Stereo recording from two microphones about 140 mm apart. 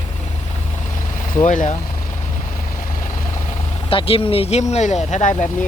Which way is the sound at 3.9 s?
40° left (ahead or behind).